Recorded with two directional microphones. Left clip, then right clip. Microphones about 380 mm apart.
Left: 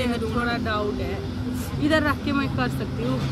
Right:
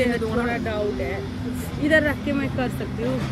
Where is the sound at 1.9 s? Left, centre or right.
Centre.